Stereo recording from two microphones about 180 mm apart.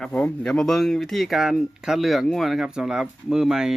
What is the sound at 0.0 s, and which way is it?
Speech, 5° left (ahead or behind).